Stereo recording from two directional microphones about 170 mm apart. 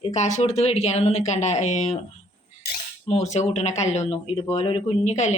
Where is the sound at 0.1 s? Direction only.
45° left (ahead or behind).